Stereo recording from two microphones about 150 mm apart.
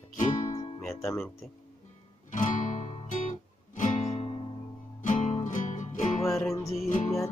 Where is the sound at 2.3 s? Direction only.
60° left (ahead or behind); by 4.5 s 40° left (ahead or behind).